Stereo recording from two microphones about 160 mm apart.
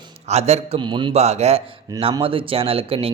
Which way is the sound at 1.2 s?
40° right (ahead or behind).